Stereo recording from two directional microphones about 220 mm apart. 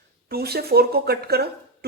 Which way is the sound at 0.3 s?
45° right (ahead or behind).